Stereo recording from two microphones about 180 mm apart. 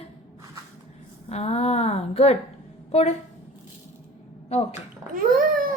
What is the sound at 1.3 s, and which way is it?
A woman's voice, 35° left (ahead or behind).